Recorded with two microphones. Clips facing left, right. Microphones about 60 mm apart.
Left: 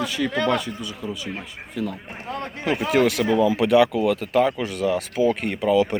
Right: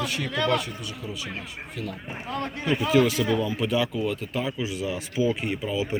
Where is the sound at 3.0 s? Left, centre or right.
Left.